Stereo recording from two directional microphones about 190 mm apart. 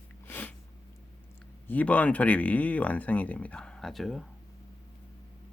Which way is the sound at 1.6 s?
10° left (ahead or behind).